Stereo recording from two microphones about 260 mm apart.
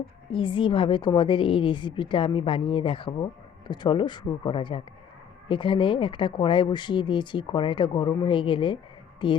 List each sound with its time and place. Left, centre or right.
0.3 s speech: centre